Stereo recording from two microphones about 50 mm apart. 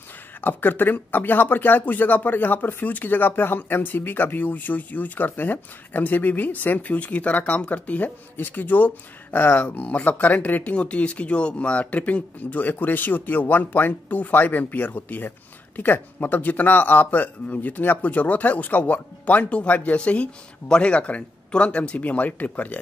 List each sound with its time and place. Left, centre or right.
0.4 s speech: left